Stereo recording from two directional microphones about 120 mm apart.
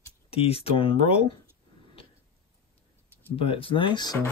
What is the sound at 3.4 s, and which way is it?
Speech, 50° left (ahead or behind).